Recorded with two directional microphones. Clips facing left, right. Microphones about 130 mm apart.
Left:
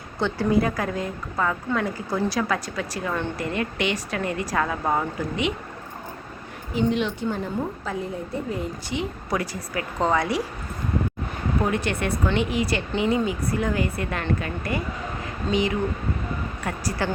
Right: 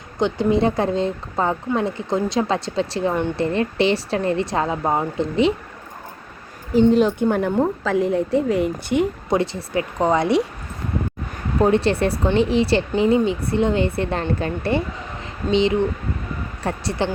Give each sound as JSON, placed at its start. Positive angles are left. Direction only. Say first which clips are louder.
{"t": 0.2, "sound": "speech", "louder": "right 4 dB", "side_deg": -20}
{"t": 6.9, "sound": "speech", "louder": "right 9 dB", "side_deg": -40}
{"t": 7.3, "sound": "a woman's voice", "louder": "right 8 dB", "side_deg": -60}
{"t": 9.3, "sound": "speech", "louder": "right 4 dB", "side_deg": -25}
{"t": 11.6, "sound": "speech", "louder": "right 10 dB", "side_deg": -30}
{"t": 15.2, "sound": "a sound", "louder": "right 6 dB", "side_deg": -25}
{"t": 16.6, "sound": "speech", "louder": "right 5 dB", "side_deg": -25}